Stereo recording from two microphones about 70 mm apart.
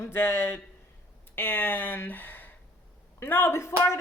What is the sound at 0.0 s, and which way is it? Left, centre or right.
A woman's voice, left.